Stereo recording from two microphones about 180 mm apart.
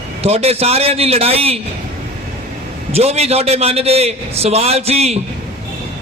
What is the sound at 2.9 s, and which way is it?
A man's voice, 35° right (ahead or behind).